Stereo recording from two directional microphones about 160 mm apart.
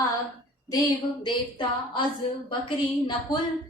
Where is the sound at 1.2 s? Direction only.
35° left (ahead or behind).